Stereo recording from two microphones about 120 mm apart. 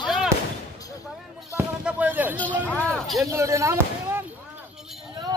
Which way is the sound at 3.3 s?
25° right (ahead or behind).